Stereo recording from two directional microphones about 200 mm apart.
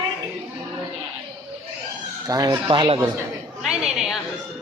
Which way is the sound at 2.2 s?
20° right (ahead or behind).